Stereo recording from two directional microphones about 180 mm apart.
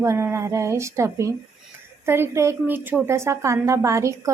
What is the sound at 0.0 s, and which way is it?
A woman's voice, 15° right (ahead or behind).